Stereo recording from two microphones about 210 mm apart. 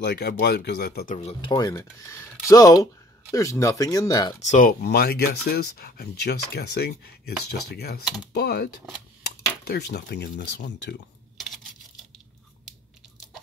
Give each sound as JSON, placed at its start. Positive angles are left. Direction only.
{"t": 0.0, "sound": "speech", "side_deg": 50}
{"t": 1.1, "sound": "speech", "side_deg": 30}
{"t": 1.5, "sound": "speech", "side_deg": 20}
{"t": 4.4, "sound": "speech", "side_deg": 35}
{"t": 11.3, "sound": "coin", "side_deg": 0}